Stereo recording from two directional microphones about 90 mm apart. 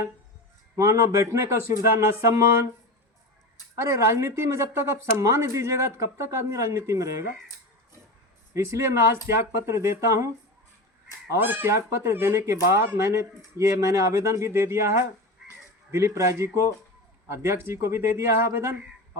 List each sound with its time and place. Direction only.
0.8 s speech: 35° right (ahead or behind)
3.8 s speech: 35° right (ahead or behind)
8.5 s speech: 30° right (ahead or behind)
11.3 s speech: 20° right (ahead or behind)